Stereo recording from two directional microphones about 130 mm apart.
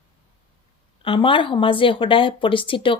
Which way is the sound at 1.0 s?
40° left (ahead or behind).